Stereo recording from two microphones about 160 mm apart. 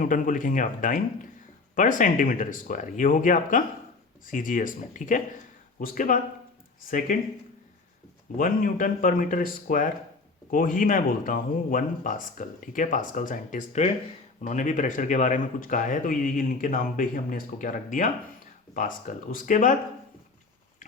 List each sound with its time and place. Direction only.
0.0 s speech: 55° left (ahead or behind)
8.4 s speech: 60° left (ahead or behind)